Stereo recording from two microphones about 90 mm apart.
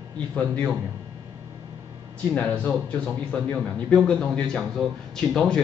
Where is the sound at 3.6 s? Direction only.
5° left (ahead or behind).